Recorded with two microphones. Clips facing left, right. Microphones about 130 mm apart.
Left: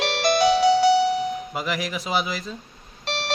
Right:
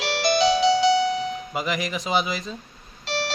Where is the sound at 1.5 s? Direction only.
Centre (ahead or behind).